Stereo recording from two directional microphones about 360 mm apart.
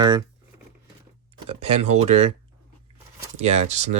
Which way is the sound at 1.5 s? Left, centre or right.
Right.